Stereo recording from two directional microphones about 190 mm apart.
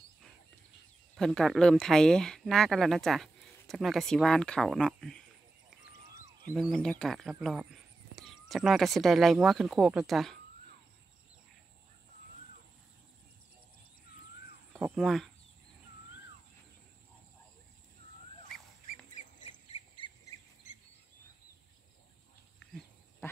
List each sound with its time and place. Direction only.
1.1 s speech: centre (ahead or behind)
6.5 s speech: centre (ahead or behind)
15.0 s speech: centre (ahead or behind)
19.2 s squawk: 40° left (ahead or behind)
20.0 s insect: 30° left (ahead or behind)